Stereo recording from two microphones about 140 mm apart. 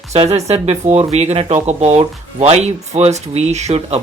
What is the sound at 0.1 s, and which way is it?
Speech, 50° right (ahead or behind).